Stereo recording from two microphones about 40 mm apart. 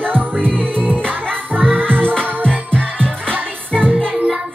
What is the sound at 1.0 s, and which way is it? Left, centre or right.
Music, right.